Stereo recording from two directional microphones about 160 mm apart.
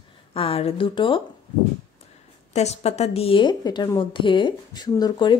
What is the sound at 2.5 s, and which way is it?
Speech, 45° left (ahead or behind).